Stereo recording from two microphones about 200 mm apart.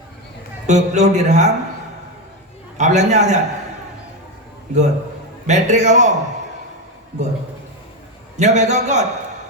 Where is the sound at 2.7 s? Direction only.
35° right (ahead or behind).